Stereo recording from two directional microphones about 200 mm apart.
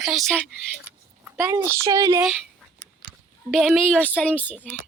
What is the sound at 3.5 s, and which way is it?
A woman's voice, centre (ahead or behind).